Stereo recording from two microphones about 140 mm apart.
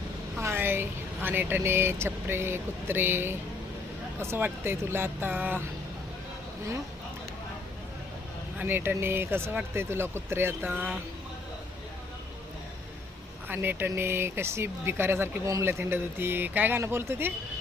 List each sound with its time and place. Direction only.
0.3 s speech: 15° right (ahead or behind)
8.5 s speech: 15° right (ahead or behind)
13.5 s speech: 15° right (ahead or behind)